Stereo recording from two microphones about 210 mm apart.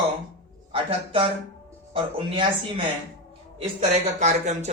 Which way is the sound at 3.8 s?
35° right (ahead or behind).